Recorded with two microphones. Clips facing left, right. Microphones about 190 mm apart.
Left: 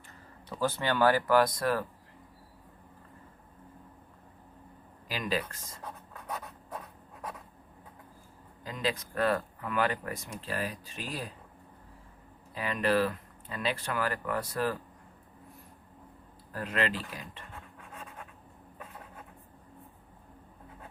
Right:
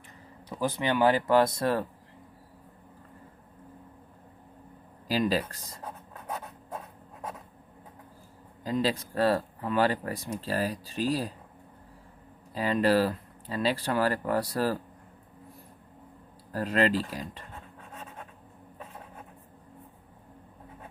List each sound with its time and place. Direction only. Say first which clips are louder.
0.5 s speech: right 2 dB; 15° right (ahead or behind)
5.0 s speech: right 6 dB; 35° right (ahead or behind)
6.3 s writing: right 2 dB; 25° right (ahead or behind)
8.6 s speech: right 6 dB; 35° right (ahead or behind)
12.5 s speech: right 4 dB; 30° right (ahead or behind)
16.5 s speech: right 6 dB; 35° right (ahead or behind)